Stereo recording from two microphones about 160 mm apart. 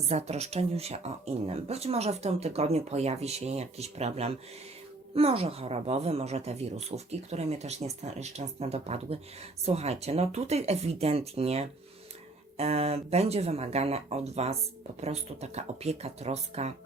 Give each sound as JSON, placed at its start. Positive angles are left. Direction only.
{"t": 0.1, "sound": "speech", "side_deg": -40}